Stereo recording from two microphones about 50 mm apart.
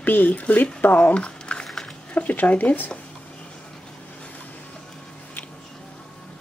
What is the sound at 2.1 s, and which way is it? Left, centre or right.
Speech, left.